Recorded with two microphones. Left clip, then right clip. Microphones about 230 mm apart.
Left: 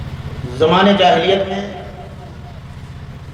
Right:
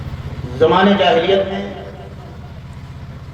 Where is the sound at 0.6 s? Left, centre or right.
Left.